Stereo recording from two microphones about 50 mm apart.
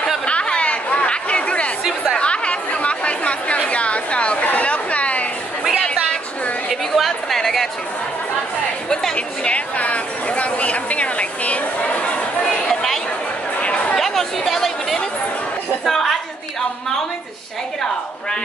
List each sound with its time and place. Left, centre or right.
0.3 s chatter: left
4.5 s a sound: left
6.7 s chatter: centre
9.1 s speech: left
12.6 s chatter: centre
13.6 s music: left
13.9 s chatter: centre
14.5 s speech: centre